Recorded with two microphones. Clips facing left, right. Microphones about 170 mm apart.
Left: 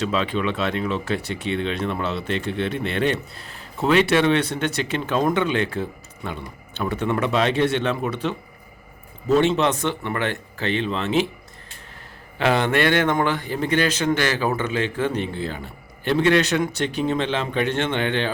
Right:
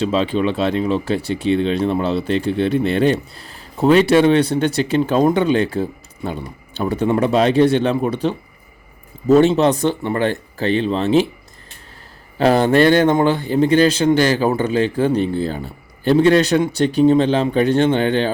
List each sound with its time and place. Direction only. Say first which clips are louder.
0.0 s speech: right 5 dB; 30° right (ahead or behind)
12.4 s speech: right 7 dB; 35° right (ahead or behind)